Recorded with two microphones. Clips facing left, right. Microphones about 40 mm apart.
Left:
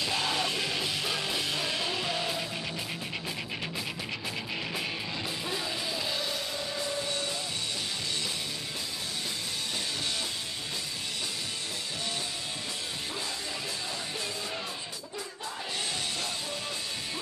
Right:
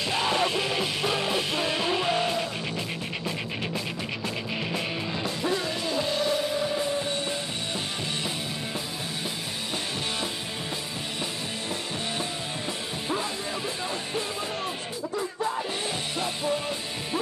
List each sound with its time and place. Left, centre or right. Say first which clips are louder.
0.0 s music: right 5 dB; centre
5.9 s music: right 7 dB; centre